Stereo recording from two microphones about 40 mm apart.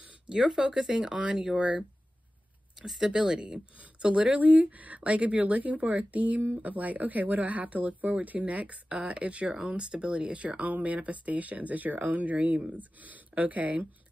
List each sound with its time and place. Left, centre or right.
0.3 s speech: centre
3.0 s speech: centre; by 6.4 s right
6.4 s speech: right